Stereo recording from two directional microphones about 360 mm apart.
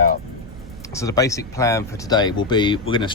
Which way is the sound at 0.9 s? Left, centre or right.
Centre.